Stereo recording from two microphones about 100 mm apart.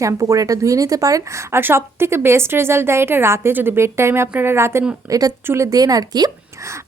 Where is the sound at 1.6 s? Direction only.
25° right (ahead or behind); by 6.3 s 40° right (ahead or behind).